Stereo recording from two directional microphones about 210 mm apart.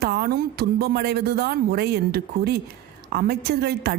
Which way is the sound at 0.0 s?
50° right (ahead or behind).